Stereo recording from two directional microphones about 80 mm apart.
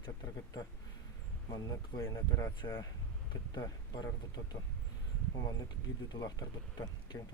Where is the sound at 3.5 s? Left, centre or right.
Left.